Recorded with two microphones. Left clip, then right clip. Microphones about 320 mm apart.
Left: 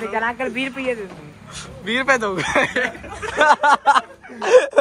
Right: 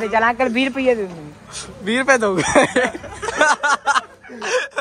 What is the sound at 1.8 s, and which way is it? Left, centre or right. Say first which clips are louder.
Speech: right 2 dB; centre.